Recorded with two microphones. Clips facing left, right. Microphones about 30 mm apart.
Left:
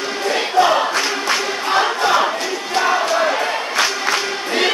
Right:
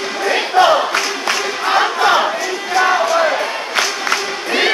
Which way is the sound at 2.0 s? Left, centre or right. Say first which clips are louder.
Right 3 dB; right.